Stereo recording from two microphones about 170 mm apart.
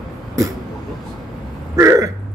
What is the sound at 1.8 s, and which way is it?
Speech, 15° right (ahead or behind).